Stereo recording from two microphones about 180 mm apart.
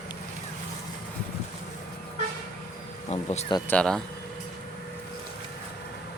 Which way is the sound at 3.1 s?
35° left (ahead or behind).